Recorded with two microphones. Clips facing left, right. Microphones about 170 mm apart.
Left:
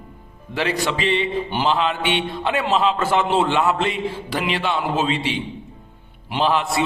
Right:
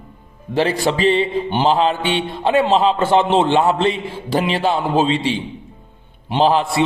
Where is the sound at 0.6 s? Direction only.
35° right (ahead or behind).